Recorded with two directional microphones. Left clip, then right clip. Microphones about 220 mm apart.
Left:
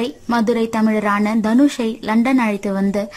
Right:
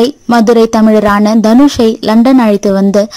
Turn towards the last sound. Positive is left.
turn(degrees=-20)  # may be behind; listen again after turning